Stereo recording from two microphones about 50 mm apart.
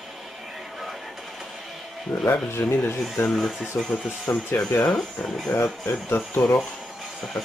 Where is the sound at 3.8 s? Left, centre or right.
Centre.